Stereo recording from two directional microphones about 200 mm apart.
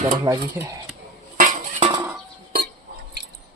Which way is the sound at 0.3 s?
15° right (ahead or behind).